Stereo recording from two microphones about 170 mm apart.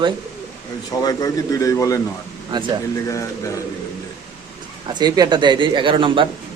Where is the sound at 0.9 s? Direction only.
20° left (ahead or behind).